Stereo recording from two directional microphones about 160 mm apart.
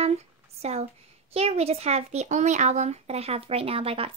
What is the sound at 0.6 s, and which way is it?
Speech, 40° right (ahead or behind).